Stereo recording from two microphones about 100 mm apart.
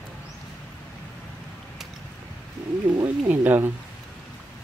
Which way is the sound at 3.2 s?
20° right (ahead or behind).